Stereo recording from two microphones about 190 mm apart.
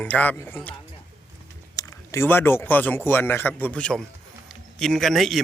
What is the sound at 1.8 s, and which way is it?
Speech, 15° left (ahead or behind).